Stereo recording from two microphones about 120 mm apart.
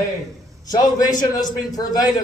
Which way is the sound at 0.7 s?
30° left (ahead or behind).